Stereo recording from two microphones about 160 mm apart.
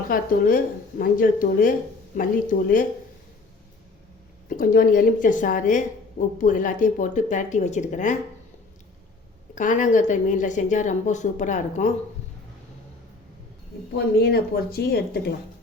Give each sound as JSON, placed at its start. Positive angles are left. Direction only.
{"t": 0.1, "sound": "speech", "side_deg": 60}
{"t": 4.4, "sound": "a woman's voice", "side_deg": 65}
{"t": 9.6, "sound": "a woman's voice", "side_deg": 50}
{"t": 13.9, "sound": "a woman's voice", "side_deg": 85}